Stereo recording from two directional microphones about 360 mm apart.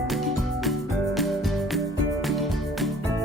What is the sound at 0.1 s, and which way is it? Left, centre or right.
Music, centre.